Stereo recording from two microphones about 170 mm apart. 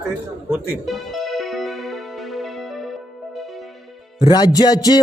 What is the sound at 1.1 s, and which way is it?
Music, centre (ahead or behind).